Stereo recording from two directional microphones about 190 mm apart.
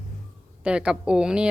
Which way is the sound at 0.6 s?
5° right (ahead or behind).